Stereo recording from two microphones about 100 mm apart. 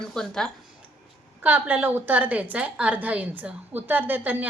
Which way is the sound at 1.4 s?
20° right (ahead or behind).